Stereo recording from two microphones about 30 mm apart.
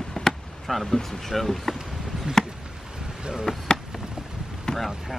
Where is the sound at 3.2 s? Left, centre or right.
Right.